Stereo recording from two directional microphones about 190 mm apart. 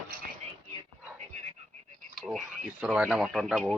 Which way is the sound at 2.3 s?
Centre (ahead or behind).